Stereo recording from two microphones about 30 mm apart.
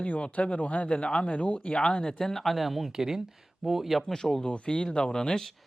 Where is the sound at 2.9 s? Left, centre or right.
Centre.